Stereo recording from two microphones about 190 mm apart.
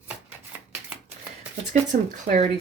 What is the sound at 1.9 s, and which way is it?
Speech, 40° right (ahead or behind).